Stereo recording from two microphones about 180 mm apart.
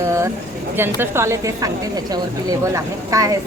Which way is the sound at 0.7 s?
10° right (ahead or behind).